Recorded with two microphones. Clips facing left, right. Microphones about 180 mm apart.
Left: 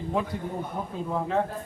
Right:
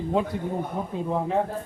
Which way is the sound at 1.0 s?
15° right (ahead or behind).